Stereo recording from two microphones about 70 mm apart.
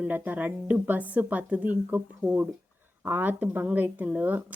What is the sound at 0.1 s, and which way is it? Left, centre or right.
Speech, right.